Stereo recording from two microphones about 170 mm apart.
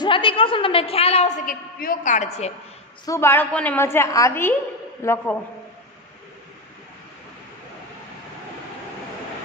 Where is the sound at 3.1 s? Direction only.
15° left (ahead or behind).